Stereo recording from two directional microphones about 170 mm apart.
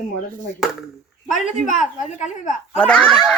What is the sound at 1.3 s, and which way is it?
A woman's voice, 50° left (ahead or behind).